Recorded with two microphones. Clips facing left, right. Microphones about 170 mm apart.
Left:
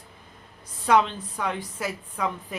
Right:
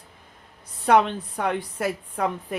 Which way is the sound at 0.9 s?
60° right (ahead or behind).